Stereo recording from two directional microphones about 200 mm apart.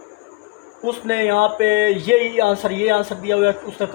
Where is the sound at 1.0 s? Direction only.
55° right (ahead or behind).